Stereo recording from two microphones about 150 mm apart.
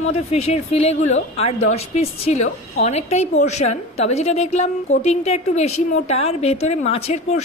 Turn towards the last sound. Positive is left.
turn(degrees=45)  # may be behind; listen again after turning